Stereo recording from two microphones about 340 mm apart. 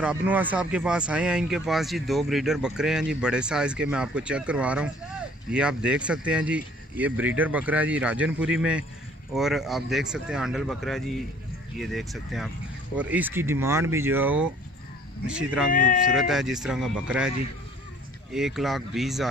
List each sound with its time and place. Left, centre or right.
0.0 s speech: centre
15.7 s speech: left
16.1 s speech: centre
18.3 s speech: centre